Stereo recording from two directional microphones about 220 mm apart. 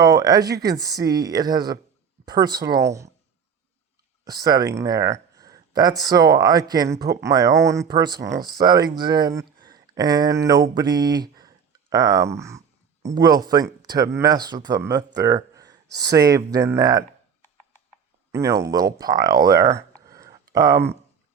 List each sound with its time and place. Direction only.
0.0 s speech: 15° right (ahead or behind)
4.3 s speech: 20° right (ahead or behind)
9.6 s a sound: 20° right (ahead or behind)
13.1 s speech: 15° right (ahead or behind)
18.3 s speech: 15° right (ahead or behind)